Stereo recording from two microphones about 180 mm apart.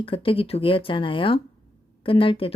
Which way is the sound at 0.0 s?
30° left (ahead or behind).